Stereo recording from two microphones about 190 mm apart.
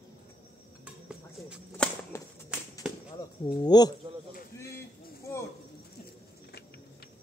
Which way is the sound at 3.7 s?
20° left (ahead or behind).